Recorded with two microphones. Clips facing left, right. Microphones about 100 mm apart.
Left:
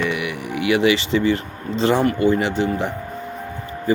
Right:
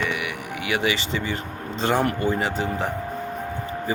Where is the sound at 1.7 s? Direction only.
45° right (ahead or behind).